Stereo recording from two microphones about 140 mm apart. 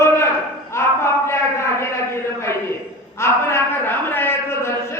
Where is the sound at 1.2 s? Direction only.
20° left (ahead or behind).